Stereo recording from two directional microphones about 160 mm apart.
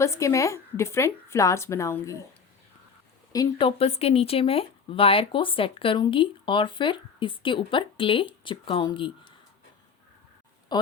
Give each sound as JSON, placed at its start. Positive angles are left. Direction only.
{"t": 0.0, "sound": "speech", "side_deg": 15}
{"t": 3.3, "sound": "speech", "side_deg": 25}
{"t": 10.7, "sound": "speech", "side_deg": 25}